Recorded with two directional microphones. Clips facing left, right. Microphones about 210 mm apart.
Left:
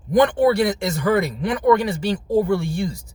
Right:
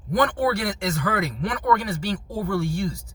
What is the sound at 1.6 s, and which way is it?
Speech, 20° left (ahead or behind).